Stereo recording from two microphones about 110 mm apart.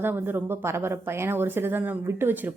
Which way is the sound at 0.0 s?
20° right (ahead or behind).